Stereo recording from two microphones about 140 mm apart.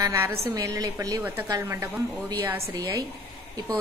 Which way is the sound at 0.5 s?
25° right (ahead or behind).